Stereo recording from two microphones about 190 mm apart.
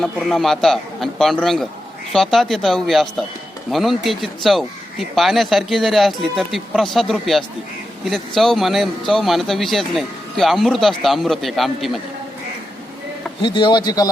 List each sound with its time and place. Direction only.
0.0 s speech: centre (ahead or behind)
13.4 s speech: 25° left (ahead or behind)